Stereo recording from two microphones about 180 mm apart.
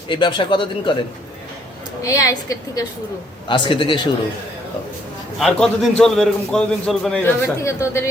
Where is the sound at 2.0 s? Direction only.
20° left (ahead or behind).